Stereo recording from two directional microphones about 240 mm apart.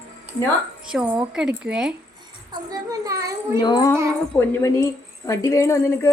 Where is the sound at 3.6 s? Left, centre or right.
Centre.